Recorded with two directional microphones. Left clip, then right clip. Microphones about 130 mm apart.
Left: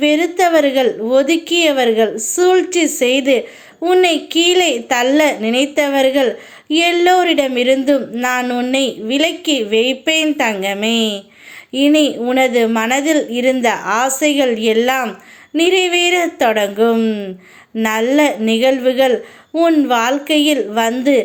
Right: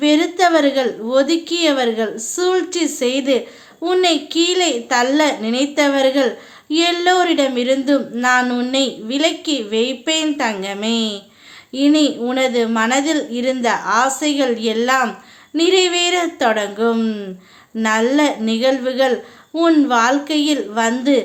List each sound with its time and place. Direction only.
0.0 s a child's voice: 20° left (ahead or behind)
17.8 s a child's voice: 25° left (ahead or behind)